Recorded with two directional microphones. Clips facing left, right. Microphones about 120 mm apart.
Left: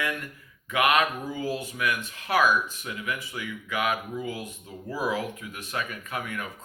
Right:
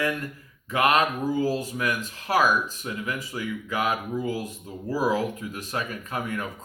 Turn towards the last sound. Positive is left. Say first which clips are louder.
# right 3 dB
turn(degrees=-35)  # may be behind; listen again after turning